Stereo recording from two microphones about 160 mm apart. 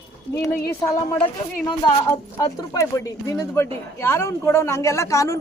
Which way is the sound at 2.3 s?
20° left (ahead or behind).